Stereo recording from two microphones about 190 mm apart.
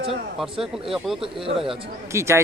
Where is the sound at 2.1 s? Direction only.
15° right (ahead or behind).